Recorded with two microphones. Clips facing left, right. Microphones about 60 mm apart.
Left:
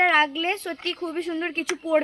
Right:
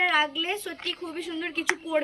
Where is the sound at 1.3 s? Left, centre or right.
Left.